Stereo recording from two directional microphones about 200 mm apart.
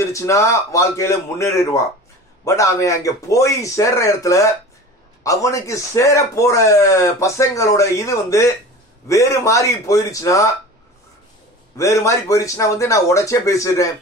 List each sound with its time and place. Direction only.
0.0 s speech: 15° left (ahead or behind)
11.7 s speech: 15° left (ahead or behind)